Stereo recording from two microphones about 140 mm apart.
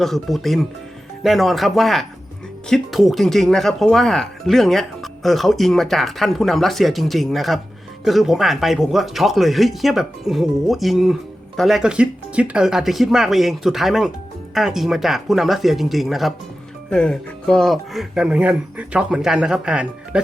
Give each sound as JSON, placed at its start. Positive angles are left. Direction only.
{"t": 0.0, "sound": "speech", "side_deg": 0}